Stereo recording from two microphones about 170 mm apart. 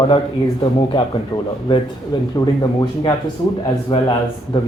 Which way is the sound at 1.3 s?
20° left (ahead or behind).